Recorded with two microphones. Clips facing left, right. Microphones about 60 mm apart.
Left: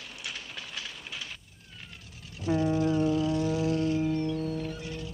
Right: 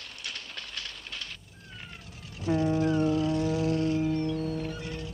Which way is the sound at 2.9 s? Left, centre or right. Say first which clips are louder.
Even; centre.